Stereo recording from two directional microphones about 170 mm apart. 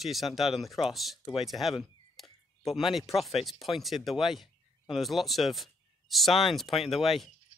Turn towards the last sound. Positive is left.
turn(degrees=0)  # may be behind; listen again after turning